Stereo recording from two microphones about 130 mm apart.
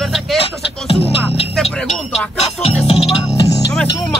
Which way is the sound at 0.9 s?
45° left (ahead or behind).